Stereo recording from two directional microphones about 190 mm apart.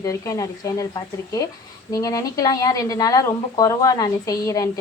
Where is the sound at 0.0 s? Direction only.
15° left (ahead or behind).